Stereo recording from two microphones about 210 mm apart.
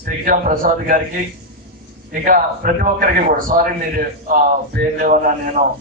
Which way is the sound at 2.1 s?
40° right (ahead or behind).